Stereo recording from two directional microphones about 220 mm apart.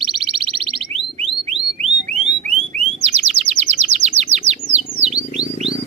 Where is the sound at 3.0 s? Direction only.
30° right (ahead or behind).